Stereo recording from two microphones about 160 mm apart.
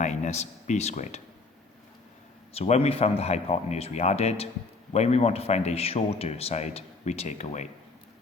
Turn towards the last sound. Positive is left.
turn(degrees=45)  # may be behind; listen again after turning